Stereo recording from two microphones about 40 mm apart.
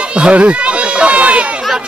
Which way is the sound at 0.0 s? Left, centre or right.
Right.